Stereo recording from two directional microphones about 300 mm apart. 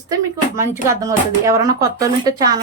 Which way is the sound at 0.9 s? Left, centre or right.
Centre.